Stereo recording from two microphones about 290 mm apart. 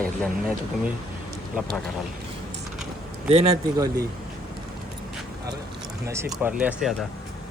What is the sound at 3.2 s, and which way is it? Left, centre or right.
Speech, centre.